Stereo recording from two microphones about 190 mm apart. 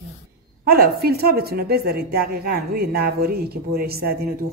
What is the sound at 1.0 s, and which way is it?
A woman's voice, 55° right (ahead or behind).